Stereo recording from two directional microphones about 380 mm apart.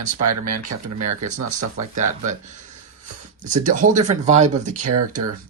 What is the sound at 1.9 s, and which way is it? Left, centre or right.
Speech, centre.